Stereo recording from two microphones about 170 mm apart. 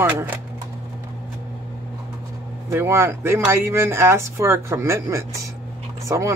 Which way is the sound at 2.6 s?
15° right (ahead or behind).